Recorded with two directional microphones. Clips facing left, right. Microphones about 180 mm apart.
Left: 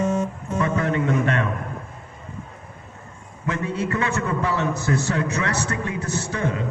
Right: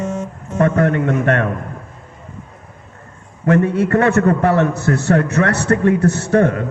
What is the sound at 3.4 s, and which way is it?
A man's voice, 60° right (ahead or behind).